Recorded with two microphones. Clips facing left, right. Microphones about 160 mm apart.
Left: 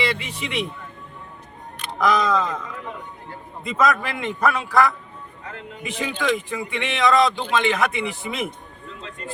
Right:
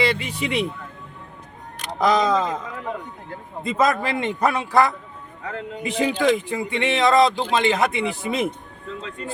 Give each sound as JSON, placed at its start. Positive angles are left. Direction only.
{"t": 0.0, "sound": "speech", "side_deg": -35}
{"t": 2.0, "sound": "speech", "side_deg": -30}
{"t": 3.7, "sound": "speech", "side_deg": -30}